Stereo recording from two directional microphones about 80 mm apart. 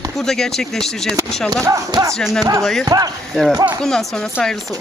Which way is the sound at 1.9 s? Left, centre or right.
Right.